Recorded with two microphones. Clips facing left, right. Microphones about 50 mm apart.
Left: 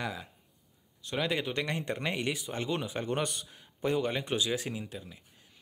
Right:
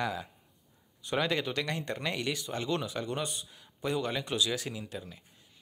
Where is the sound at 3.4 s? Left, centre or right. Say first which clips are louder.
Left 3 dB; left.